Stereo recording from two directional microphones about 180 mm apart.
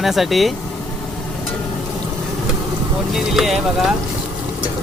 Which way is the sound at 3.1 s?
Centre (ahead or behind).